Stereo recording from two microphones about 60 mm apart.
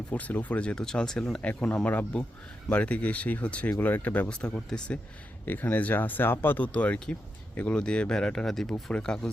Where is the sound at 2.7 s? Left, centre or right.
Left.